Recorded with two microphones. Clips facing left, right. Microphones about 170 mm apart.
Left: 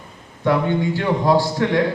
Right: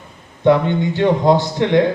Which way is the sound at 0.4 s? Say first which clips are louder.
Right 4 dB; 20° right (ahead or behind).